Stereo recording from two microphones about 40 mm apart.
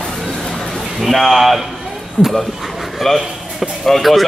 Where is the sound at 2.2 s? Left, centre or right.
Left.